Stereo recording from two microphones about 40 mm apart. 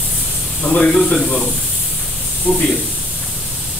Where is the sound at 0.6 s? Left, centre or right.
Centre.